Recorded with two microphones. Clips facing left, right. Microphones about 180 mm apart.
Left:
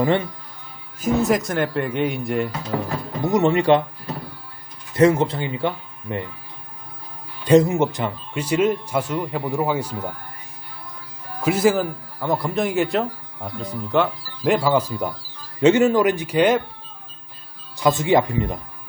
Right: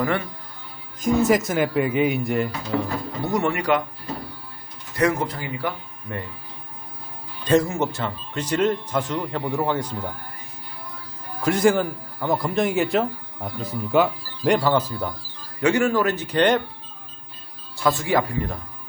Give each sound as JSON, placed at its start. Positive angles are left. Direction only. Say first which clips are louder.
{"t": 0.0, "sound": "speech", "louder": "left 4 dB", "side_deg": 20}
{"t": 1.0, "sound": "a man's voice", "louder": "right 1 dB", "side_deg": 0}
{"t": 3.2, "sound": "speech", "louder": "left 6 dB", "side_deg": 20}
{"t": 4.9, "sound": "speech", "louder": "left 6 dB", "side_deg": 25}
{"t": 7.4, "sound": "speech", "louder": "left 5 dB", "side_deg": 20}
{"t": 11.3, "sound": "a man's voice", "louder": "left 1 dB", "side_deg": 5}
{"t": 17.7, "sound": "speech", "louder": "left 4 dB", "side_deg": 20}